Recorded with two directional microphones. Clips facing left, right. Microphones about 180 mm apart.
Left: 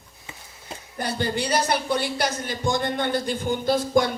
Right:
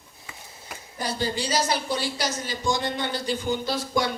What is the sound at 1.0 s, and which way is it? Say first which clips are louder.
Speech: left 2 dB; 60° left (ahead or behind).